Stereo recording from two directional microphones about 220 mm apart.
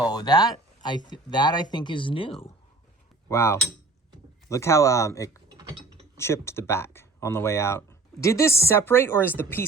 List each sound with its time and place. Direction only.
0.1 s speech: 20° left (ahead or behind)
3.2 s speech: 10° left (ahead or behind)